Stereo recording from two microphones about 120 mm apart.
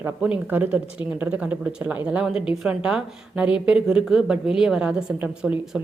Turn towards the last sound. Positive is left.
turn(degrees=-10)  # may be behind; listen again after turning